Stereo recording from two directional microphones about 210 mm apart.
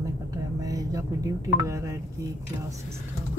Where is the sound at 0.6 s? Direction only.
15° right (ahead or behind).